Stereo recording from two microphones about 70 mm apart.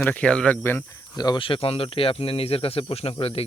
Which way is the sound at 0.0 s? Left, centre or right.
Centre.